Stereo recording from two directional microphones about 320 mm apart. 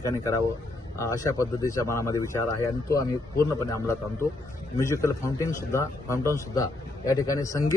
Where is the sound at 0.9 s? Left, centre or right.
Centre.